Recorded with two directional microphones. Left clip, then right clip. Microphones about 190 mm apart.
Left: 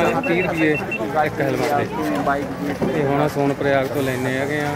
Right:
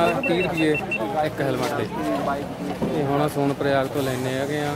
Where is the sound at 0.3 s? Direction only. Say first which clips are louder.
Left 3 dB; 20° right (ahead or behind).